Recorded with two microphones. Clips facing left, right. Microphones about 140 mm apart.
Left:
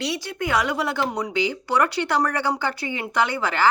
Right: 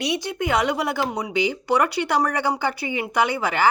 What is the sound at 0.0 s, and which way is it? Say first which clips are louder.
A woman's voice: right 2 dB; 20° right (ahead or behind).